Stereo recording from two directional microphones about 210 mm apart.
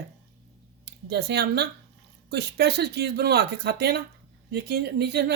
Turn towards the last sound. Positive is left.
turn(degrees=-50)  # may be behind; listen again after turning